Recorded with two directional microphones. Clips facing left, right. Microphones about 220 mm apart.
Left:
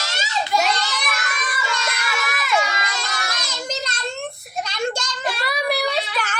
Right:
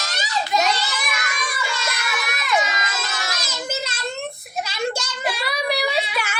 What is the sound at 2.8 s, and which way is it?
Crowd, 5° right (ahead or behind).